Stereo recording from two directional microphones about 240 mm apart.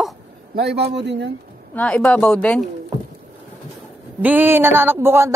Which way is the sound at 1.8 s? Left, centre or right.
Centre.